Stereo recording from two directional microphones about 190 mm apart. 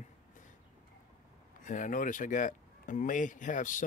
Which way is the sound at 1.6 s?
45° left (ahead or behind).